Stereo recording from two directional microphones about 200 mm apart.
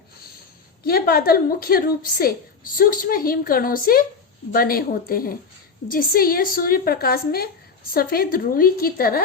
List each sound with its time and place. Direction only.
0.9 s a woman's voice: 50° left (ahead or behind)